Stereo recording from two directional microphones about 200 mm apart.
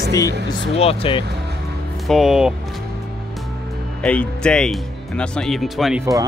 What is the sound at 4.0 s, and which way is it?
Speech, 5° left (ahead or behind).